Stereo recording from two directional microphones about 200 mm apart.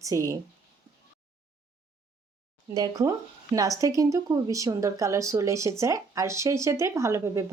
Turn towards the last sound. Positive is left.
turn(degrees=-15)  # may be behind; listen again after turning